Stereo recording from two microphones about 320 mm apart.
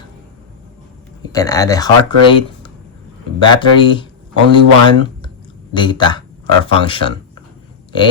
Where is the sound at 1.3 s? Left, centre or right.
Centre.